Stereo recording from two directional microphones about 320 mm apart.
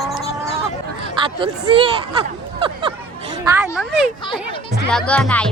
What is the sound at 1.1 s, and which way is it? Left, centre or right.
Speech, centre.